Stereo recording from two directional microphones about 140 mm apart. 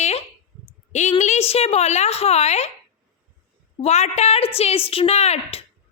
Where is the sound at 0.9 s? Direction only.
60° left (ahead or behind).